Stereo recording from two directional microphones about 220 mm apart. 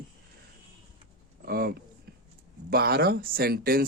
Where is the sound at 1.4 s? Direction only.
45° right (ahead or behind).